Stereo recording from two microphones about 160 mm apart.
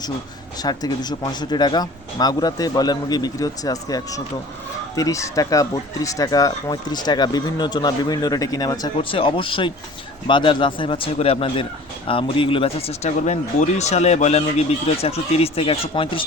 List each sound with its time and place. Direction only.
0.6 s speech: 25° left (ahead or behind)
9.0 s a man's voice: 35° left (ahead or behind)